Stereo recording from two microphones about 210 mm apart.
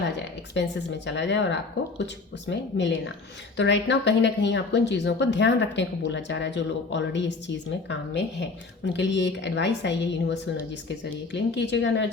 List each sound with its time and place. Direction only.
0.5 s a woman's voice: 55° left (ahead or behind)